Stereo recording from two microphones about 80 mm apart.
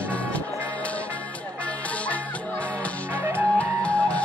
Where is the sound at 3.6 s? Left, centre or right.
Centre.